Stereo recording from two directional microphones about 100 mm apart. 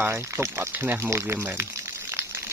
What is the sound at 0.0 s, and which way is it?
Speech, 25° right (ahead or behind).